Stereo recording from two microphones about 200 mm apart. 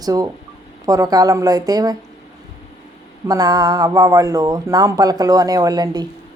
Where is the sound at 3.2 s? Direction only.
20° right (ahead or behind).